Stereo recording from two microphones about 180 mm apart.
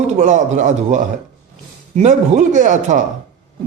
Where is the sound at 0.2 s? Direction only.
40° right (ahead or behind).